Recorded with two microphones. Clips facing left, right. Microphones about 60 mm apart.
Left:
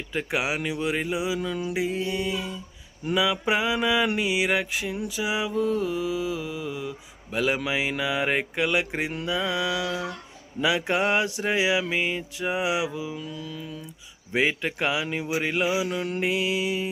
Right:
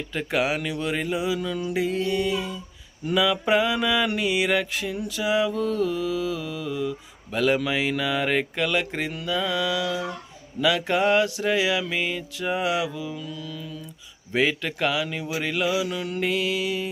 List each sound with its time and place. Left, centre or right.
0.1 s mantra: centre